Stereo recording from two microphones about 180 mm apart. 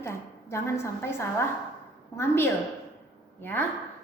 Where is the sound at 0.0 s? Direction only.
15° left (ahead or behind).